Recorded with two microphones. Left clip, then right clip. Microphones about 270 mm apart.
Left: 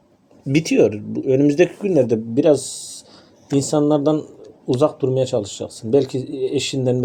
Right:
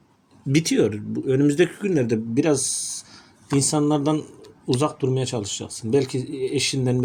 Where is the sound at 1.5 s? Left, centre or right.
Right.